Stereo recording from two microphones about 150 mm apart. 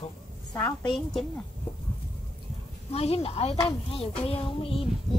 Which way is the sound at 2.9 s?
40° left (ahead or behind).